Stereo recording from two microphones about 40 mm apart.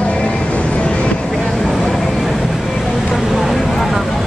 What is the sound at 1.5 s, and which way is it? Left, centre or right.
Vehicle, centre.